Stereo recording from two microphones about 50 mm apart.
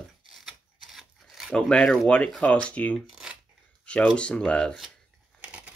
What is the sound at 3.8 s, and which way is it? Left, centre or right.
Speech, left.